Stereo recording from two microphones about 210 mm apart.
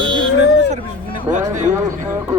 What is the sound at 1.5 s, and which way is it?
Speech, 35° right (ahead or behind).